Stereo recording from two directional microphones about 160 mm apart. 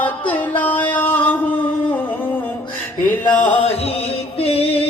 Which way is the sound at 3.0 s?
10° left (ahead or behind).